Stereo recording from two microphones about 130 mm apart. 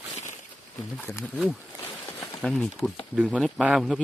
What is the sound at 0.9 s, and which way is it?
Speech, 10° left (ahead or behind).